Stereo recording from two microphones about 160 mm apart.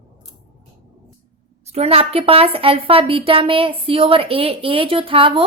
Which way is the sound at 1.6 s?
40° right (ahead or behind).